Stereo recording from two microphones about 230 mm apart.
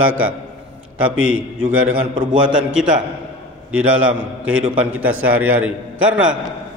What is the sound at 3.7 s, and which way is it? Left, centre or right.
Speech, centre.